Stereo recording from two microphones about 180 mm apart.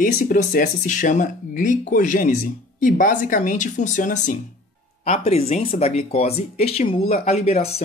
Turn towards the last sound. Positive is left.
turn(degrees=35)  # may be behind; listen again after turning